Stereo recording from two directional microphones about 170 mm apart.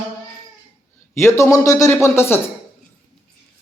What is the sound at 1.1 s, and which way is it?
A man's voice, 15° left (ahead or behind).